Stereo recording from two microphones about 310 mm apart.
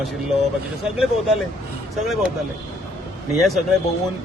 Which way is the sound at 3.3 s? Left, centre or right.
Centre.